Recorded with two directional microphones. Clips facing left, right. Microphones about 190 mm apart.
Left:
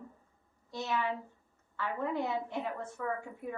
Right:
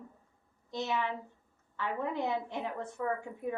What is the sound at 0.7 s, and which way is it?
A woman's voice, 15° right (ahead or behind).